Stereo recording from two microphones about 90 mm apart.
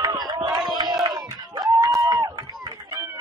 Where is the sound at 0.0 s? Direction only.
50° right (ahead or behind).